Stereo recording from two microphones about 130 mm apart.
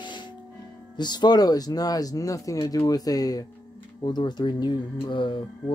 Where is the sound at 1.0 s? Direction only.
35° left (ahead or behind).